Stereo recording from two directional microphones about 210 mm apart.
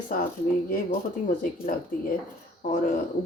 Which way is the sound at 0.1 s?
40° left (ahead or behind).